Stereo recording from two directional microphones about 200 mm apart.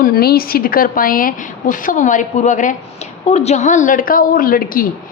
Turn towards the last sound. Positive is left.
turn(degrees=45)  # may be behind; listen again after turning